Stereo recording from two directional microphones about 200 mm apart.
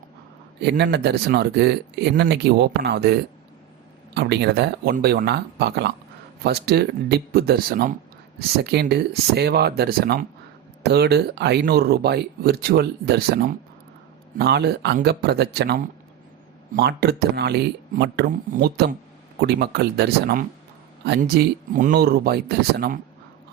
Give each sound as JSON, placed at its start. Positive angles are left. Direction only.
{"t": 0.6, "sound": "speech", "side_deg": -60}